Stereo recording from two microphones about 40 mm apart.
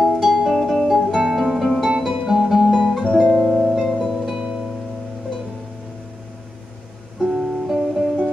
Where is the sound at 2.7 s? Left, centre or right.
Centre.